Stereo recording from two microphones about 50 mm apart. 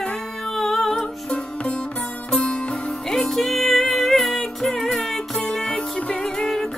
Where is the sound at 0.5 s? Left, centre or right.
Centre.